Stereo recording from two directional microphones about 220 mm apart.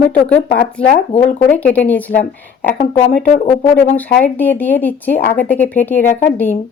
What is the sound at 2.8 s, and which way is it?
Speech, 40° left (ahead or behind).